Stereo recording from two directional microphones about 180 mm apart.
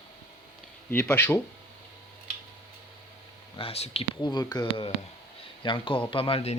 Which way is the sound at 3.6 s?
35° left (ahead or behind).